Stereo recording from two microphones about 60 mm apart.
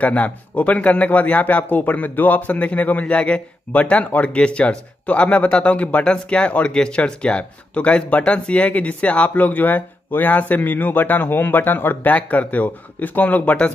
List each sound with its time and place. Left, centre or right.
0.0 s a man's voice: left